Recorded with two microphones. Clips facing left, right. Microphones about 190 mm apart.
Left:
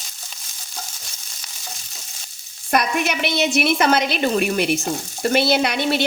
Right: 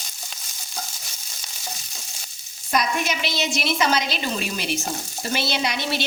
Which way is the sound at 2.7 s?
60° left (ahead or behind).